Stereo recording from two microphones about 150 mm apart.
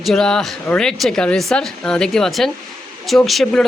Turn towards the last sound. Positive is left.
turn(degrees=5)  # may be behind; listen again after turning